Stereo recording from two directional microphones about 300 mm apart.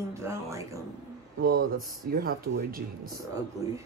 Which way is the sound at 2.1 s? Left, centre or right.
Right.